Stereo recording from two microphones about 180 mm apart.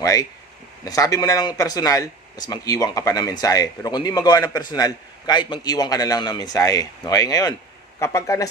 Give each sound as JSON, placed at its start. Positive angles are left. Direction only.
{"t": 0.0, "sound": "speech", "side_deg": 20}